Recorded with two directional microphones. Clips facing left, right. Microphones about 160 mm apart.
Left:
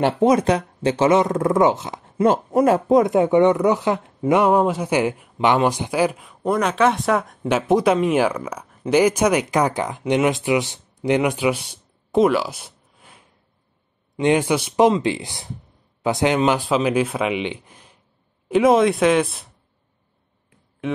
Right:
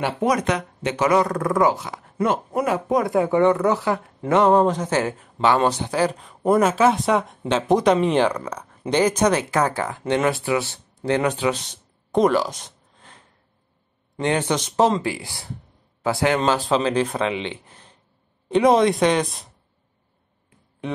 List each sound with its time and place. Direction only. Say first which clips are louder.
0.2 s speech: left 3 dB; 30° left (ahead or behind)
2.2 s speech: left 6 dB; 35° left (ahead or behind)
2.9 s speech: left 4 dB; 20° left (ahead or behind)
6.4 s speech: right 2 dB; 5° right (ahead or behind)
14.2 s a man's voice: left 4 dB; 15° left (ahead or behind)